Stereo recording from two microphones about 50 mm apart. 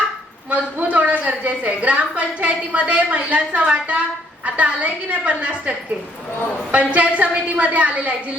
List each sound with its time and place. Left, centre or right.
0.5 s a woman's voice: right